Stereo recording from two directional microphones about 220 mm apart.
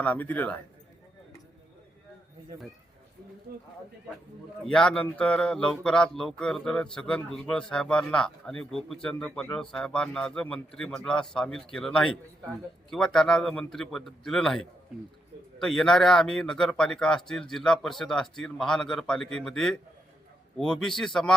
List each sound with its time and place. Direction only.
0.0 s a man's voice: 5° left (ahead or behind)
3.5 s speech: 45° right (ahead or behind)
4.6 s speech: 5° left (ahead or behind)